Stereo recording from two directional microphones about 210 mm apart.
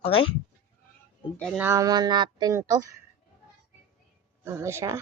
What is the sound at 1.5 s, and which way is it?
A woman's voice, 10° right (ahead or behind).